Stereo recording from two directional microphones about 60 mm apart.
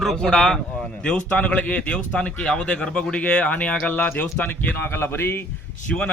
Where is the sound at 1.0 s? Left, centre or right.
Left.